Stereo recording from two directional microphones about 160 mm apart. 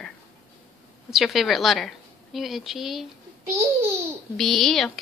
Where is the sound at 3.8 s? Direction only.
15° right (ahead or behind).